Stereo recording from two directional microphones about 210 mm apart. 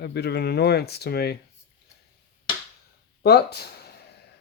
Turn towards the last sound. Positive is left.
turn(degrees=50)  # may be behind; listen again after turning